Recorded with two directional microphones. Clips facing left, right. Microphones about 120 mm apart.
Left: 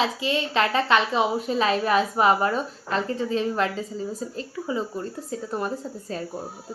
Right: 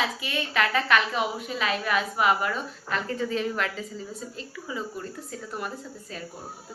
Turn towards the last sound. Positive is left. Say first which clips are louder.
# left 7 dB
turn(degrees=35)  # may be behind; listen again after turning